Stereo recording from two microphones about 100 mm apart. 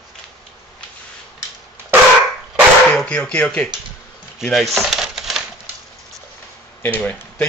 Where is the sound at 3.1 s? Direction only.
10° left (ahead or behind).